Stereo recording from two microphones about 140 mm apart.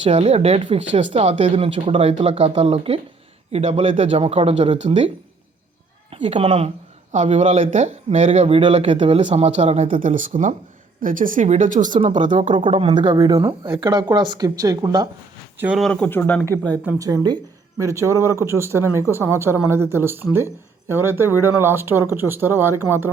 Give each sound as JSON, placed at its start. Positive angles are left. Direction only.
{"t": 0.0, "sound": "speech", "side_deg": -45}
{"t": 7.1, "sound": "speech", "side_deg": -55}
{"t": 9.9, "sound": "speech", "side_deg": -70}
{"t": 11.9, "sound": "speech", "side_deg": -45}
{"t": 12.2, "sound": "speech", "side_deg": -60}
{"t": 12.5, "sound": "speech", "side_deg": -40}
{"t": 15.5, "sound": "speech", "side_deg": -10}
{"t": 15.8, "sound": "speech", "side_deg": 10}
{"t": 17.0, "sound": "speech", "side_deg": -25}